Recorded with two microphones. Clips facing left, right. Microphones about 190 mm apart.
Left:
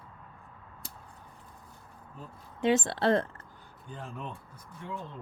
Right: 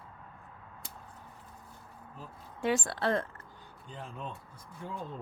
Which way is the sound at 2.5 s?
20° left (ahead or behind).